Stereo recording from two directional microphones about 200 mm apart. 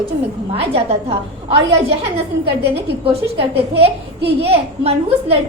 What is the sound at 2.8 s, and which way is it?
A woman's voice, 30° right (ahead or behind).